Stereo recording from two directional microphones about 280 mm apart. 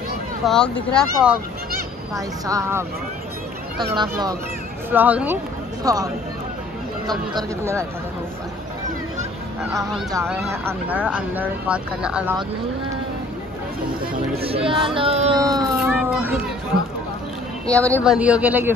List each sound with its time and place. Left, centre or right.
0.5 s speech: centre
2.1 s speech: centre
3.9 s speech: centre
7.1 s speech: centre
10.1 s speech: centre
14.4 s speech: centre
15.6 s a sound: centre
17.6 s speech: centre